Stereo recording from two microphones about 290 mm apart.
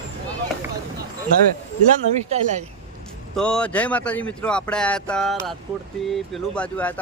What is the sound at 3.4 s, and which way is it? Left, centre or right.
Speech, centre.